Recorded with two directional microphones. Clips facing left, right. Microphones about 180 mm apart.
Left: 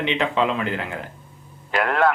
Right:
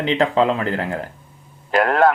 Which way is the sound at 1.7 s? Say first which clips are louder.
Right 4 dB; 40° right (ahead or behind).